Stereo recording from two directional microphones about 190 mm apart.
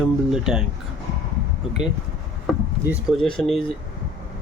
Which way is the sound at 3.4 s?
30° left (ahead or behind).